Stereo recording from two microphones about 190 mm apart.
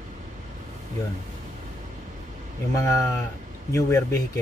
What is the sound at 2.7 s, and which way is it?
Speech, 15° left (ahead or behind).